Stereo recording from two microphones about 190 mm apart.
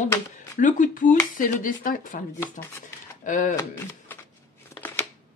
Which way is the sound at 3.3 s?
40° left (ahead or behind).